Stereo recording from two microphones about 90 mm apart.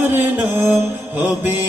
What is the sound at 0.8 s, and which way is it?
Mantra, 20° right (ahead or behind).